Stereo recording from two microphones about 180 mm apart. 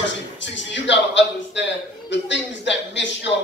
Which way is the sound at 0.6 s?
80° left.